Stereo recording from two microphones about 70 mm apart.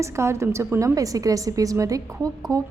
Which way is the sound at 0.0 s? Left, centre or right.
Right.